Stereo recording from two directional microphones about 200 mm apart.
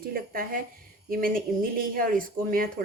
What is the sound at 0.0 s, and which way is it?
Speech, 45° right (ahead or behind).